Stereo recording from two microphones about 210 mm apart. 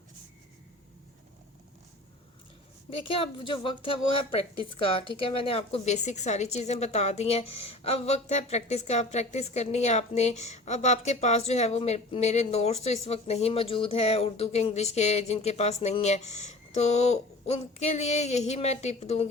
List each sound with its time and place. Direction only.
3.1 s a woman's voice: 25° left (ahead or behind)